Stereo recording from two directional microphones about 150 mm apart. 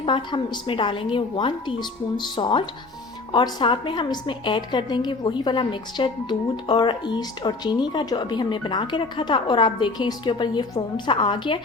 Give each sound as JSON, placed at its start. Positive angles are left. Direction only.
{"t": 0.0, "sound": "a woman's voice", "side_deg": 30}